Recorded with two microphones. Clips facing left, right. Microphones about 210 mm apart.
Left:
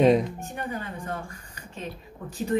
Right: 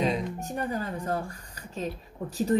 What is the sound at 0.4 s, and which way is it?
Speech, 35° right (ahead or behind).